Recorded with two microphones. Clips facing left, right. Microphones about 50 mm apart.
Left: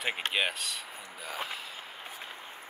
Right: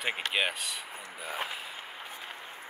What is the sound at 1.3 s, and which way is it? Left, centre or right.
Speech, right.